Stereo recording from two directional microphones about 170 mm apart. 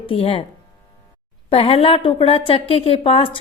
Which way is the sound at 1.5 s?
35° left (ahead or behind).